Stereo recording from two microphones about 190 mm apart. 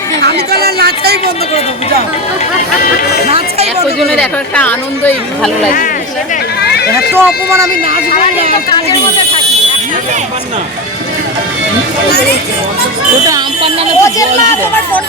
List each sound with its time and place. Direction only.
0.3 s speech: 55° right (ahead or behind)
3.2 s speech: 35° right (ahead or behind)
4.0 s speech: 5° left (ahead or behind)
7.1 s speech: 15° right (ahead or behind)
8.7 s speech: 25° left (ahead or behind)
13.2 s speech: 25° right (ahead or behind)
14.0 s speech: 15° left (ahead or behind)